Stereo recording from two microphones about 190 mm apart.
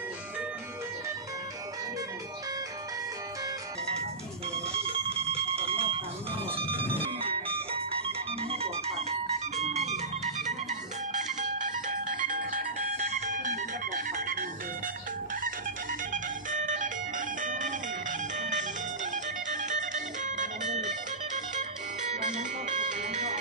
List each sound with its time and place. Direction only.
4.8 s a sound: 30° right (ahead or behind)
6.5 s music: 30° right (ahead or behind)
15.4 s music: 45° right (ahead or behind)
22.1 s music: 40° right (ahead or behind)